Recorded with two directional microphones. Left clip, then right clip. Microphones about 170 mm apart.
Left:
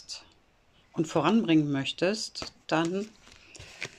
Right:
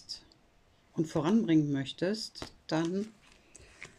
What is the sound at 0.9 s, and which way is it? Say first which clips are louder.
Speech: left 5 dB; 30° right (ahead or behind).